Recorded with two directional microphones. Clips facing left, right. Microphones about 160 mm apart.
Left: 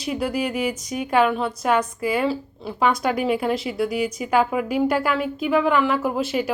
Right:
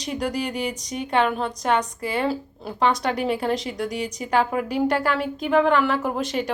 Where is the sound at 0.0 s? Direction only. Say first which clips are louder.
Left 2 dB; 5° left (ahead or behind).